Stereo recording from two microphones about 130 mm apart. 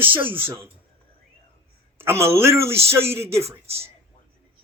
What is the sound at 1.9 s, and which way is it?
Speech, 20° right (ahead or behind).